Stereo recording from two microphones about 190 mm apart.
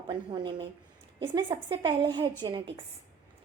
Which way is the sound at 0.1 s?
25° right (ahead or behind).